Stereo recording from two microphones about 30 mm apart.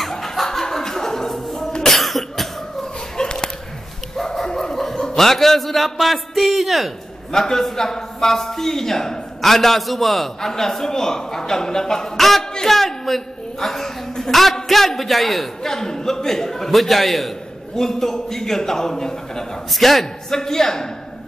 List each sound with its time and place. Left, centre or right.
0.2 s chuckle: centre
1.8 s cough: centre
3.2 s a sound: left
4.2 s dog: centre
4.5 s chuckle: centre
5.1 s a man's voice: centre
7.3 s a man's voice: centre
12.2 s a man's voice: centre
12.6 s a sound: centre
14.3 s a man's voice: centre
15.6 s a man's voice: centre
17.7 s a man's voice: centre
19.7 s a man's voice: centre
20.2 s a man's voice: centre